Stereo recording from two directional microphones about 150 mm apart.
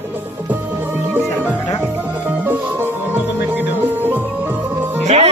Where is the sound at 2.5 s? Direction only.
15° right (ahead or behind).